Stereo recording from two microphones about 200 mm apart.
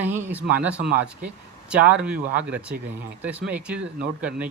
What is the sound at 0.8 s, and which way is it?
Speech, 50° right (ahead or behind).